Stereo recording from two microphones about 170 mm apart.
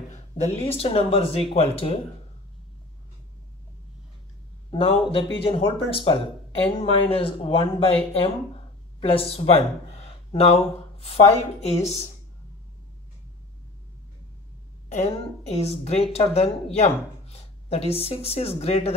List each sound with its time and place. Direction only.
0.7 s speech: 35° left (ahead or behind)
4.6 s speech: 35° left (ahead or behind)
14.9 s speech: 40° left (ahead or behind)